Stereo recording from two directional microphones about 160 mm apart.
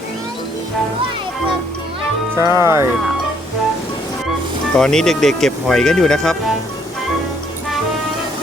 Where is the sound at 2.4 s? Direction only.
15° right (ahead or behind).